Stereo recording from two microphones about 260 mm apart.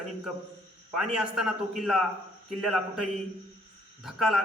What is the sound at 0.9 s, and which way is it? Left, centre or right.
Speech, centre.